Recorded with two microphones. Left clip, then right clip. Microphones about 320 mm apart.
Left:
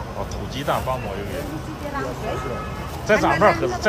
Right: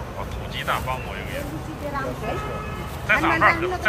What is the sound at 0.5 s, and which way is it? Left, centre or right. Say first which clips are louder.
Speech: left 2 dB; centre.